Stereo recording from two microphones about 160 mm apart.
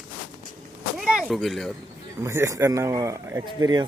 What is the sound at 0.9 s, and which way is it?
Speech, centre (ahead or behind).